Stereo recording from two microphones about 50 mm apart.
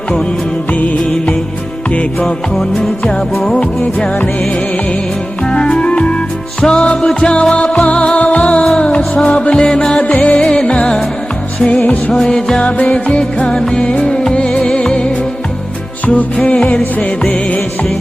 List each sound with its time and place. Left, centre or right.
1.9 s music: left
2.6 s music: centre
5.5 s music: centre
10.0 s music: left
12.1 s music: centre